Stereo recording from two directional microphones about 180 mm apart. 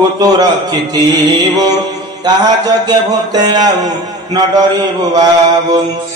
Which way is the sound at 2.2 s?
25° right (ahead or behind).